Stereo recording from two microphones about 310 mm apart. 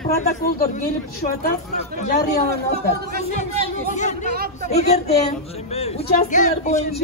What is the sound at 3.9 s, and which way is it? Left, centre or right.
Speech, left.